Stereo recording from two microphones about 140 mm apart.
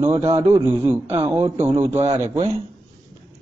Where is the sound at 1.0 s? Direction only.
45° right (ahead or behind).